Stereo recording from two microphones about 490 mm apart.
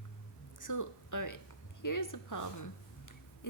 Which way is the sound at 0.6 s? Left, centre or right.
Left.